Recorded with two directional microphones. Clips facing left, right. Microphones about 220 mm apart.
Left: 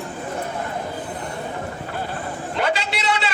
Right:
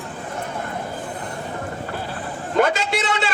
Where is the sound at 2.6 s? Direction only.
50° right (ahead or behind).